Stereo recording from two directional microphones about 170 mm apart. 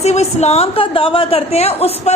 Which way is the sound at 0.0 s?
40° left (ahead or behind).